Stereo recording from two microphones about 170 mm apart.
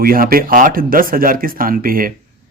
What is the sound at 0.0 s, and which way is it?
Speech, 60° right (ahead or behind).